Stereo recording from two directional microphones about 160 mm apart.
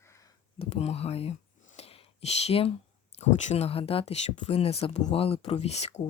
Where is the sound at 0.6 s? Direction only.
40° left (ahead or behind).